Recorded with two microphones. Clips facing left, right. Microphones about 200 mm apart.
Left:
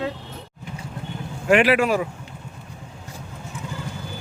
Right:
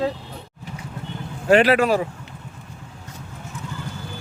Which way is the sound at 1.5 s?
40° right (ahead or behind).